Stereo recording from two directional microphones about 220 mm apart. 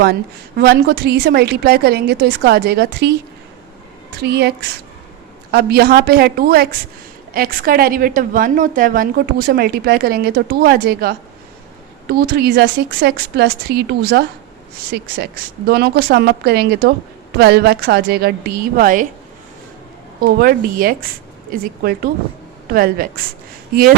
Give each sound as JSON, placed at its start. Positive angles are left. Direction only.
{"t": 0.0, "sound": "a woman's voice", "side_deg": -50}
{"t": 4.2, "sound": "a woman's voice", "side_deg": -50}
{"t": 20.2, "sound": "a woman's voice", "side_deg": -40}